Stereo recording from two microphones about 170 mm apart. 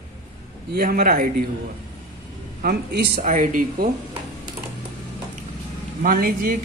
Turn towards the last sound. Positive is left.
turn(degrees=-55)  # may be behind; listen again after turning